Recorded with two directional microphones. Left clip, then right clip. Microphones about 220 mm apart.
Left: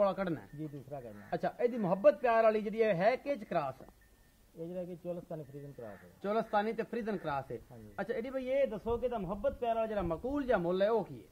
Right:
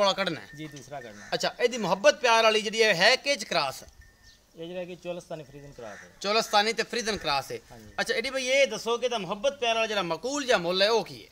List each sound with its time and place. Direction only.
0.0 s speech: 10° right (ahead or behind)
5.0 s speech: centre (ahead or behind)
6.2 s speech: 20° right (ahead or behind)